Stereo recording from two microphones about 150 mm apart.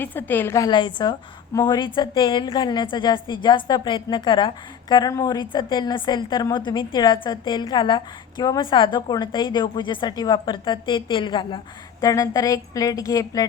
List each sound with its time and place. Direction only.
0.0 s a woman's voice: 15° left (ahead or behind)